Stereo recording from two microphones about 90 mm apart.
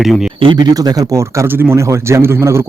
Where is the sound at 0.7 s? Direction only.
45° right (ahead or behind).